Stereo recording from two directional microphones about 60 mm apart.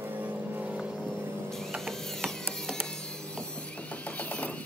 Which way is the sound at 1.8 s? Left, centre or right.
Centre.